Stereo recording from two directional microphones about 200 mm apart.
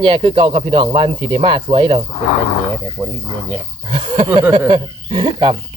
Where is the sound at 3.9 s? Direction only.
25° right (ahead or behind).